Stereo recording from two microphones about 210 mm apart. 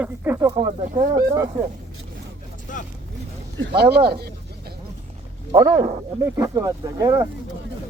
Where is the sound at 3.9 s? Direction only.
50° right (ahead or behind).